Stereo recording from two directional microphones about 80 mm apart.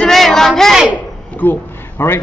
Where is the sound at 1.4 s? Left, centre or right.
Left.